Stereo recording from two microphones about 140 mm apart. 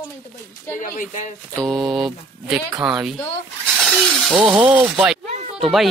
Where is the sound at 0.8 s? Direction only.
65° left (ahead or behind).